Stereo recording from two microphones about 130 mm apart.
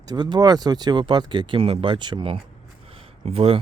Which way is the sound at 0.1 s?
35° right (ahead or behind).